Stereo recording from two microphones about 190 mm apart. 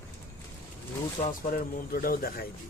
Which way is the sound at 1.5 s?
50° left (ahead or behind).